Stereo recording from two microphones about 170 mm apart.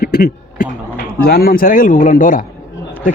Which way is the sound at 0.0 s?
60° left (ahead or behind).